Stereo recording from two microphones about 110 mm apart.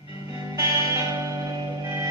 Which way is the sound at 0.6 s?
30° right (ahead or behind).